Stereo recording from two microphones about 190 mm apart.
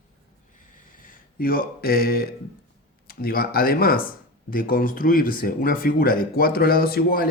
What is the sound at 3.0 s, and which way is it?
Speech, 50° left (ahead or behind).